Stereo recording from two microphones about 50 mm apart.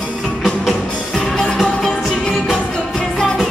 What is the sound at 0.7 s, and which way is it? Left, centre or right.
Music, centre.